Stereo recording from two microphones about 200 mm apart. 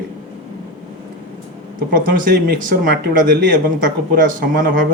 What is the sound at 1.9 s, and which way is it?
Speech, 45° right (ahead or behind).